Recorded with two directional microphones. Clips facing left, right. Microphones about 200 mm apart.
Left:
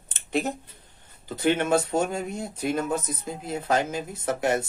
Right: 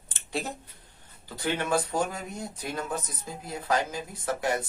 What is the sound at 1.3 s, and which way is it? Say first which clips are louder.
Speech: left 6 dB; 20° left (ahead or behind).